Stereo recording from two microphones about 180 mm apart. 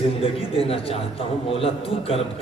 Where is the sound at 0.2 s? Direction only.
30° left (ahead or behind).